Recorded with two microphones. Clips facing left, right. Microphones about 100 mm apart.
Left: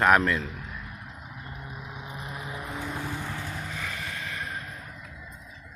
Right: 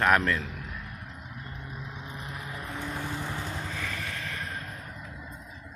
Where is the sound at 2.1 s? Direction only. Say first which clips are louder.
Left 3 dB; 15° left (ahead or behind).